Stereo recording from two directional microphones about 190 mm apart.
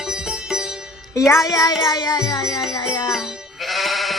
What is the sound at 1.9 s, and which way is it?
Music, 20° left (ahead or behind).